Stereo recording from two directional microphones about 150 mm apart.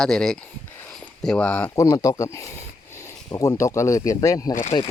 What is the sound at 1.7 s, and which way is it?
Speech, 20° left (ahead or behind).